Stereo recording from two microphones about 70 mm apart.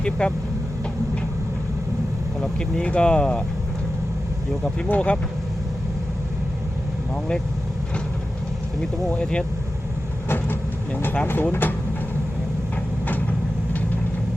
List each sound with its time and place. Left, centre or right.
0.0 s speech: centre
2.4 s speech: centre
4.6 s speech: centre
8.8 s speech: centre
10.2 s vehicle: left
11.0 s speech: left